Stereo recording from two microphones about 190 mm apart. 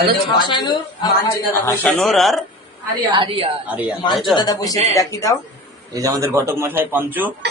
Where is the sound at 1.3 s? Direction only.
10° left (ahead or behind).